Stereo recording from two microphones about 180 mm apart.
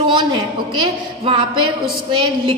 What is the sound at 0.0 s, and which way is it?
A woman's voice, 25° right (ahead or behind).